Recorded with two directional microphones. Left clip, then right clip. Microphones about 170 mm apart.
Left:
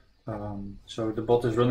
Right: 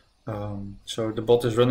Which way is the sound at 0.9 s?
15° right (ahead or behind).